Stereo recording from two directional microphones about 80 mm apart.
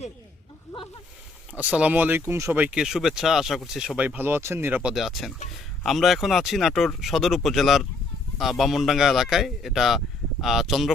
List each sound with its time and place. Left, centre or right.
1.5 s speech: centre
2.7 s speech: centre
3.9 s speech: right
4.9 s speech: centre